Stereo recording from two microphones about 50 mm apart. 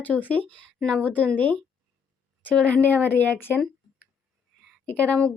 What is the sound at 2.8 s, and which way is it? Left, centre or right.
Speech, left.